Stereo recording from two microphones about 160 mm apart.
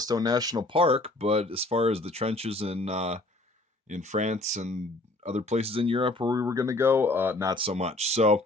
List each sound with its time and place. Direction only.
0.0 s speech: 25° right (ahead or behind)
7.4 s speech: 35° right (ahead or behind)